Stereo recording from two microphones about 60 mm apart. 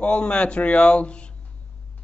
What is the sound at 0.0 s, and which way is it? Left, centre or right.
A man's voice, centre.